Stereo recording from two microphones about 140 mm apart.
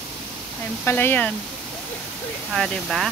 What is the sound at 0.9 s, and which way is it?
Speech, 15° left (ahead or behind).